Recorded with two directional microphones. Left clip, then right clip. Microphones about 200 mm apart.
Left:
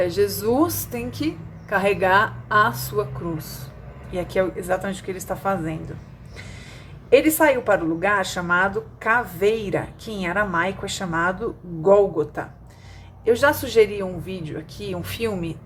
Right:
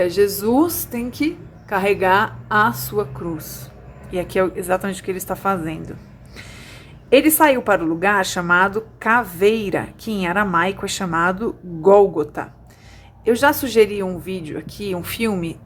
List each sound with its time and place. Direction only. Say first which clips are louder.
0.0 s a woman's voice: right 4 dB; 20° right (ahead or behind)
7.1 s a woman's voice: right 3 dB; 25° right (ahead or behind)